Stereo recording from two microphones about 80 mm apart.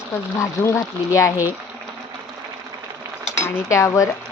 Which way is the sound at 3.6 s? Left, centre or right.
Left.